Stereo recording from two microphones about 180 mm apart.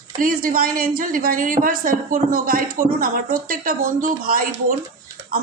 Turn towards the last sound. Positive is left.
turn(degrees=-50)  # may be behind; listen again after turning